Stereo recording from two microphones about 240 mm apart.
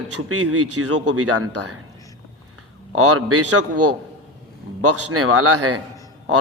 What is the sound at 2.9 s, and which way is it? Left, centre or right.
A man's voice, right.